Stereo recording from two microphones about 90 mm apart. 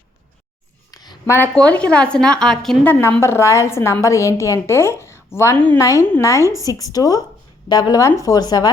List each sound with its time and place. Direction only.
1.5 s a woman's voice: 10° left (ahead or behind)
2.8 s a woman's voice: 20° left (ahead or behind); by 8.7 s 45° left (ahead or behind)